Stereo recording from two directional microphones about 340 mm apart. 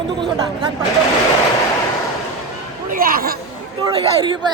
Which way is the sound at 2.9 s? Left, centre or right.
Right.